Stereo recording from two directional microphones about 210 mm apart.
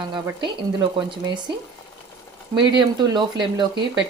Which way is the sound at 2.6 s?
20° right (ahead or behind).